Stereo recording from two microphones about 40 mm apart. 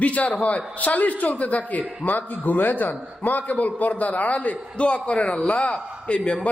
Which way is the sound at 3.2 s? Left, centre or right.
Left.